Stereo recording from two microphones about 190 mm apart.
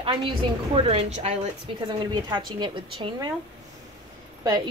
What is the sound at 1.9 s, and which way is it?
A woman's voice, 25° right (ahead or behind).